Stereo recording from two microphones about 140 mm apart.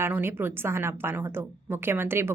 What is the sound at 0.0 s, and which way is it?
A woman's voice, 15° right (ahead or behind).